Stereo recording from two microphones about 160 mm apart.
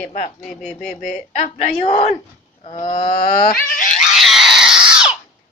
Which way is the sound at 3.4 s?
60° left (ahead or behind).